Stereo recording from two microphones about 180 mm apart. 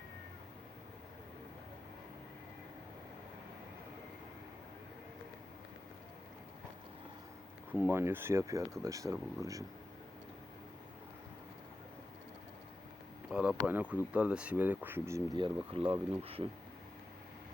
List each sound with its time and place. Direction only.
7.7 s speech: 10° right (ahead or behind)
13.3 s speech: 5° right (ahead or behind); by 15.8 s 25° right (ahead or behind)